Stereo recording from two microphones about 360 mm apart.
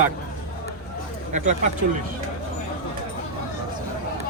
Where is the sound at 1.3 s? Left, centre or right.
Centre.